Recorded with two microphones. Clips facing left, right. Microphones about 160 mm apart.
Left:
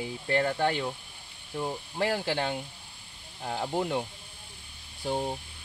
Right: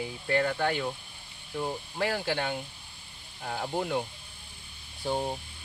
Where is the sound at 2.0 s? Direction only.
30° left (ahead or behind).